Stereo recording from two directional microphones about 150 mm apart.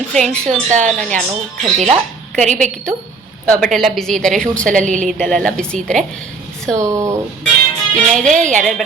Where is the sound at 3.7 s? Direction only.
Centre (ahead or behind).